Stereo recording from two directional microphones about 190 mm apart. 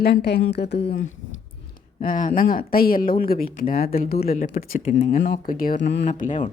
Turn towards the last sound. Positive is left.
turn(degrees=40)  # may be behind; listen again after turning